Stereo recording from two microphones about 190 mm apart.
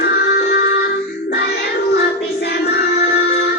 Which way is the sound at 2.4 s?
60° left (ahead or behind).